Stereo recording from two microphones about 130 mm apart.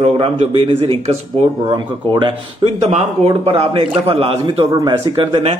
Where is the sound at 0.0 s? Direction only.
50° right (ahead or behind).